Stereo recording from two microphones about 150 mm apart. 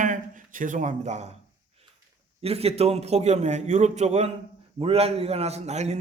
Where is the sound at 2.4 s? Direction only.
40° right (ahead or behind).